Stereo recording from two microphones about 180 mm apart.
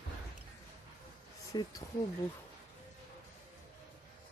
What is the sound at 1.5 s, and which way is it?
Speech, 20° left (ahead or behind).